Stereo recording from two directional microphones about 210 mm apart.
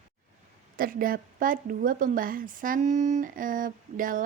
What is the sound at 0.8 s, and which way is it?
A woman's voice, 40° right (ahead or behind).